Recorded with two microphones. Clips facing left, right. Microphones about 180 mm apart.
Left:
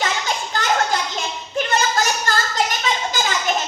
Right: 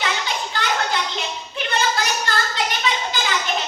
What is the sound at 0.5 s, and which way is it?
Children playing, 45° left (ahead or behind).